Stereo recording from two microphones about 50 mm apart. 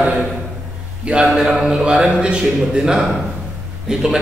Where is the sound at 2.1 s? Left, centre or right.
Right.